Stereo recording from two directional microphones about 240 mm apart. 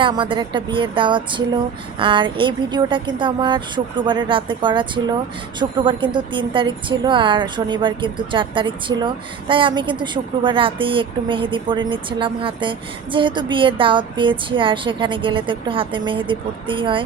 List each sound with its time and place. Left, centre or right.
0.0 s a woman's voice: centre